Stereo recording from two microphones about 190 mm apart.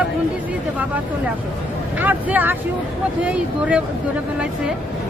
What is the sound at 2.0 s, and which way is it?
Speech, 10° right (ahead or behind).